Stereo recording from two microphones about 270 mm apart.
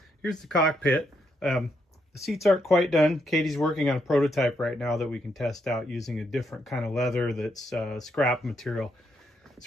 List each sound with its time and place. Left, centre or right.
0.2 s speech: centre